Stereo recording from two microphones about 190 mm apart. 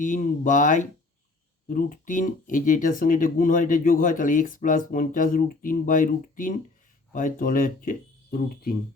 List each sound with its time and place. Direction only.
0.0 s speech: 45° left (ahead or behind)